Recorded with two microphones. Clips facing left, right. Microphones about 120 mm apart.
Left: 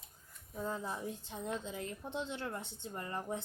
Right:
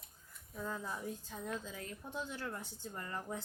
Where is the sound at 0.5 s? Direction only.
25° left (ahead or behind).